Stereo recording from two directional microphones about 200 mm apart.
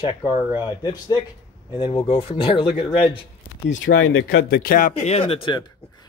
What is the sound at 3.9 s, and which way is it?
Speech, 80° left.